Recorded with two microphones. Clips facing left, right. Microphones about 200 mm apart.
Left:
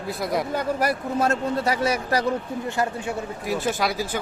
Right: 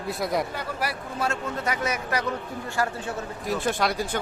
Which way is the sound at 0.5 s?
45° left (ahead or behind).